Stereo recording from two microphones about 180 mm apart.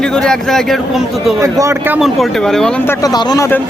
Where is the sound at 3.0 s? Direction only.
20° left (ahead or behind).